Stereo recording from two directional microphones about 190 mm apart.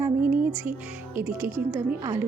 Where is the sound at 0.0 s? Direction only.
10° right (ahead or behind).